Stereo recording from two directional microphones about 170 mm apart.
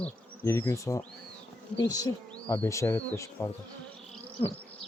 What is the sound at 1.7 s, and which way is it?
Speech, 25° left (ahead or behind).